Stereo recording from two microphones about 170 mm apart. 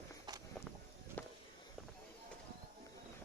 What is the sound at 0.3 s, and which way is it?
Walk, 25° right (ahead or behind).